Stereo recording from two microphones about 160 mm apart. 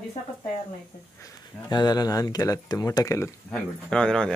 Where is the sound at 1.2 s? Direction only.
25° left (ahead or behind).